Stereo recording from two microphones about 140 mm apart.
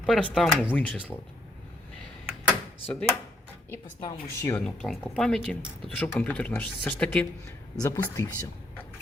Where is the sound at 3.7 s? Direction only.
20° left (ahead or behind).